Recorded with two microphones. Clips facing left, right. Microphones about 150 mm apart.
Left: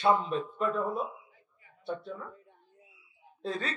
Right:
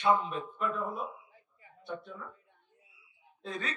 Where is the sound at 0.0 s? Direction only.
30° left (ahead or behind).